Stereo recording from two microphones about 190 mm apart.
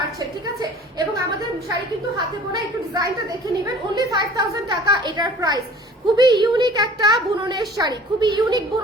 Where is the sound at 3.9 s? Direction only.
20° right (ahead or behind).